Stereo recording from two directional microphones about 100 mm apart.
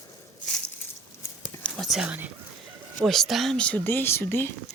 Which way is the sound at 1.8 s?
Centre (ahead or behind).